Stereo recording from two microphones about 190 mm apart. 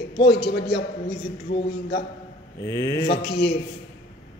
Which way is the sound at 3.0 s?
60° left (ahead or behind).